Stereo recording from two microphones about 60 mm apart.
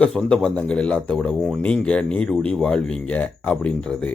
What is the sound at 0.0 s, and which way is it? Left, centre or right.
Speech, centre.